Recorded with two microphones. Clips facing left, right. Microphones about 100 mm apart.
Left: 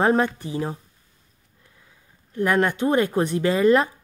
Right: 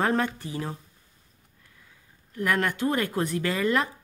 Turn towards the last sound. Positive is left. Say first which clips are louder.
# left 7 dB
turn(degrees=30)  # may be behind; listen again after turning